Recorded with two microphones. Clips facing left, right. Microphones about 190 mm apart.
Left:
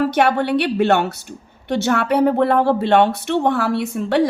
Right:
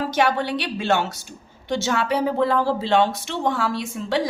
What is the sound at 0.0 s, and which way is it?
A woman's voice, 60° left (ahead or behind).